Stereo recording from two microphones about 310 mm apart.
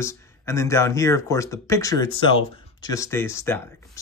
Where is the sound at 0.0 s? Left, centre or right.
Centre.